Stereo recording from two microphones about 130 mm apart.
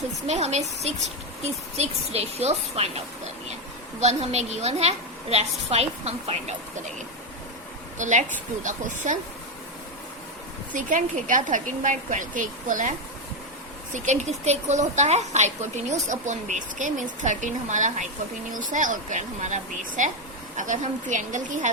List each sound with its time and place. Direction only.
0.3 s a woman's voice: 60° right (ahead or behind)
4.0 s a woman's voice: 60° right (ahead or behind)
7.9 s a woman's voice: 70° right (ahead or behind)
10.7 s a woman's voice: 80° right
13.9 s speech: 65° right (ahead or behind)
18.7 s speech: 80° right